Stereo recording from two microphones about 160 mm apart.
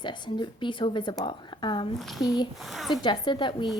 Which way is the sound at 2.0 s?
Centre (ahead or behind).